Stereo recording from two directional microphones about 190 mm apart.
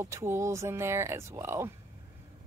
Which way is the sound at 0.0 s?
15° right (ahead or behind).